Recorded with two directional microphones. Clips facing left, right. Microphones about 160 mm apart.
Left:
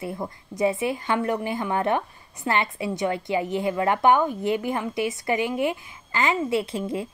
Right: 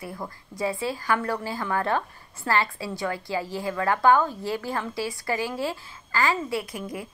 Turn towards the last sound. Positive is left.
turn(degrees=25)  # may be behind; listen again after turning